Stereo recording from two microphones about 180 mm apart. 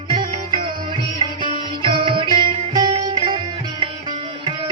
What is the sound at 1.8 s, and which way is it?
Music, 30° right (ahead or behind).